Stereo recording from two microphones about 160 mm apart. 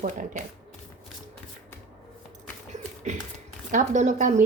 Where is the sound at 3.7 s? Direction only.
50° right (ahead or behind).